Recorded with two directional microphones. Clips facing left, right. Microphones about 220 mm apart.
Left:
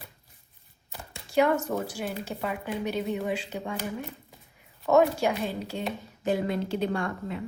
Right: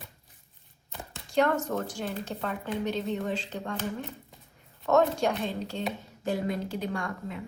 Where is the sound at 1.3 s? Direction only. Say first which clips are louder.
Left 2 dB; 10° left (ahead or behind).